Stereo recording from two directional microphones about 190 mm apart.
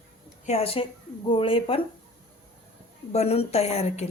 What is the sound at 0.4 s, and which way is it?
A woman's voice, 35° left (ahead or behind).